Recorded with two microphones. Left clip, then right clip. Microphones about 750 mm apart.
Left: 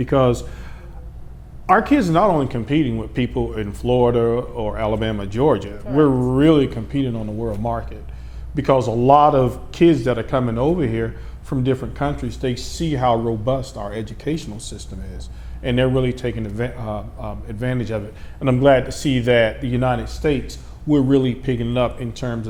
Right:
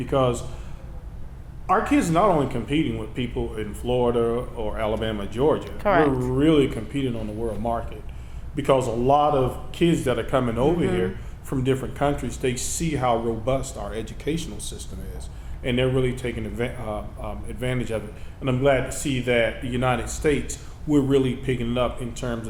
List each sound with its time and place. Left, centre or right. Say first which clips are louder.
0.0 s a man's voice: left 5 dB; left
1.6 s a man's voice: left 5 dB; left
5.8 s speech: right 3 dB; right
6.3 s a man's voice: left 4 dB; left